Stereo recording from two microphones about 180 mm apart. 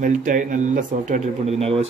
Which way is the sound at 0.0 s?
45° right (ahead or behind).